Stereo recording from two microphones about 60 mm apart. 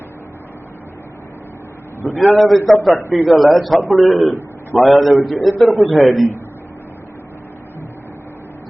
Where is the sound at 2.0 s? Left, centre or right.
Left.